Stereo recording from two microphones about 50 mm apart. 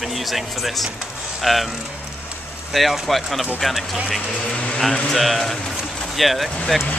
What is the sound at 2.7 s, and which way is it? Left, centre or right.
Speech, centre.